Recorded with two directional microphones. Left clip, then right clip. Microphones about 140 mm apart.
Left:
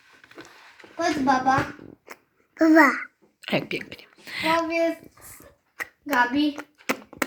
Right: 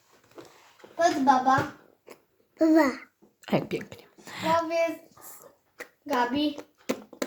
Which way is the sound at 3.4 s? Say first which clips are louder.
Left 2 dB; 45° right (ahead or behind).